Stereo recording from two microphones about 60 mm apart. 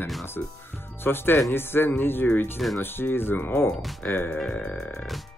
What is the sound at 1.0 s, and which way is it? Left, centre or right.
Speech, left.